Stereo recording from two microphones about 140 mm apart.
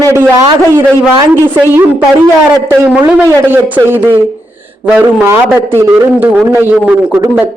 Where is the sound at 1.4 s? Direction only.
15° right (ahead or behind).